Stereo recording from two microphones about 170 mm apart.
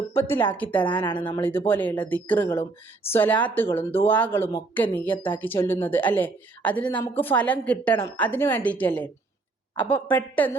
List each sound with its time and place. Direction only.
0.1 s a woman's voice: 15° left (ahead or behind)
0.8 s a woman's voice: 30° left (ahead or behind)
1.4 s a woman's voice: 10° left (ahead or behind)